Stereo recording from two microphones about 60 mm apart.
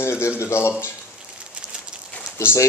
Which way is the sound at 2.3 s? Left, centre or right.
Left.